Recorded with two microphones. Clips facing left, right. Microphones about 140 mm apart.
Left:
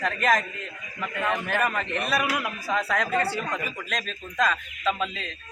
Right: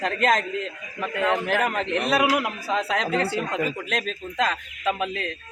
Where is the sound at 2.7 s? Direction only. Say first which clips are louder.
Right 1 dB; 20° right (ahead or behind).